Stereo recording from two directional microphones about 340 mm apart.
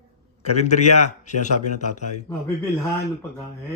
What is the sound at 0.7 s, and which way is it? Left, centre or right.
Speech, left.